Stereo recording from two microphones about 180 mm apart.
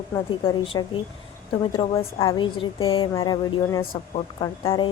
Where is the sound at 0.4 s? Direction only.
30° left (ahead or behind).